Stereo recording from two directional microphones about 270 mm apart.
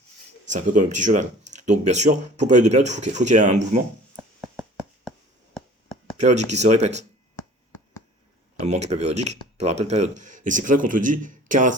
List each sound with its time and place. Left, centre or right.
0.5 s speech: right
6.1 s speech: right
8.6 s speech: right